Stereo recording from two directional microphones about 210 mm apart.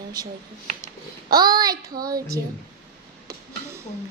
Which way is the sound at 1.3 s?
20° right (ahead or behind).